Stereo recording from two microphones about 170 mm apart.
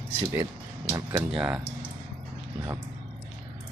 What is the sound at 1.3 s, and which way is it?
Speech, 5° right (ahead or behind).